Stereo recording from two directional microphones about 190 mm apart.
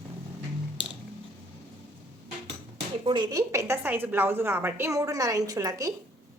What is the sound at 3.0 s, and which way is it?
A woman's voice, 25° right (ahead or behind).